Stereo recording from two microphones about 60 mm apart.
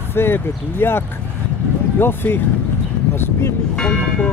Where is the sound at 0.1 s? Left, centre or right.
Left.